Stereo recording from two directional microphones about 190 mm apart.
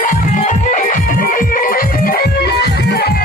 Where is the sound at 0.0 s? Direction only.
45° left (ahead or behind).